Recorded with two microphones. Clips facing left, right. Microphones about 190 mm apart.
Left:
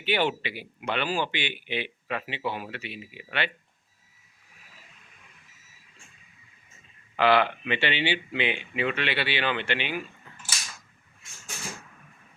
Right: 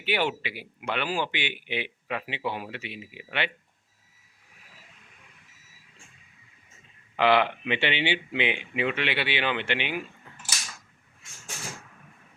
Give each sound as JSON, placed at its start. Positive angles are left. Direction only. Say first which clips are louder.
{"t": 0.0, "sound": "speech", "louder": "left 1 dB", "side_deg": -10}
{"t": 7.2, "sound": "speech", "louder": "even", "side_deg": -20}